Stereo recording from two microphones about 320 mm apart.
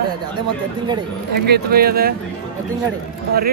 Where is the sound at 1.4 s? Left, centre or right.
Right.